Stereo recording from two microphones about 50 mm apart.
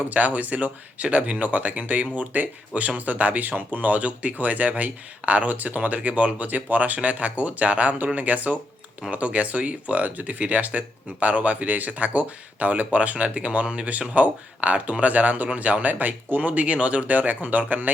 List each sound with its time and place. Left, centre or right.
0.0 s speech: right